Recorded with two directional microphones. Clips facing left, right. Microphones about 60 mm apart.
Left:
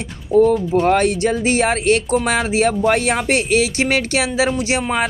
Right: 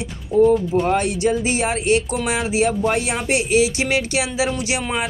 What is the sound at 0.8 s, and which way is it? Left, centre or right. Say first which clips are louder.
Speech: left 3 dB; left.